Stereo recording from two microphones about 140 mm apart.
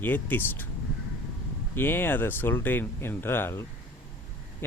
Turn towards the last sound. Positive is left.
turn(degrees=15)  # may be behind; listen again after turning